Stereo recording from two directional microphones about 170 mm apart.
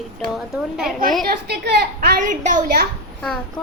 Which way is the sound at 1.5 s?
75° right (ahead or behind).